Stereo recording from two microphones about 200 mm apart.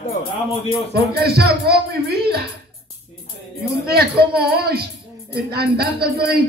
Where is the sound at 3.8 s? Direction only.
50° right (ahead or behind).